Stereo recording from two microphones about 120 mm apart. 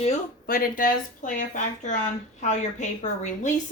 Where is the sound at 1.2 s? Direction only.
90° left.